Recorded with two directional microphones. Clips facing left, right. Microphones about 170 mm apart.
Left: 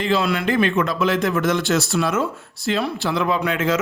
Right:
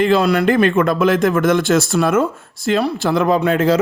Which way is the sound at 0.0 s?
50° right (ahead or behind).